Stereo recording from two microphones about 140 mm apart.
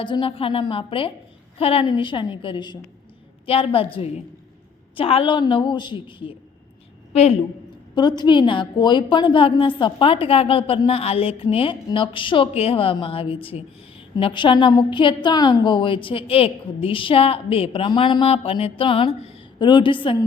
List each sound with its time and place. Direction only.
0.0 s a woman's voice: 35° left (ahead or behind)
7.9 s a woman's voice: 30° left (ahead or behind)